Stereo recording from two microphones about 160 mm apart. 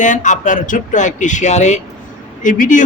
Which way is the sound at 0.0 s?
50° left (ahead or behind).